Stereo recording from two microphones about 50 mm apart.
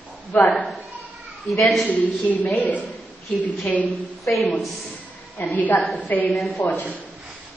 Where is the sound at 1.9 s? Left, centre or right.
Left.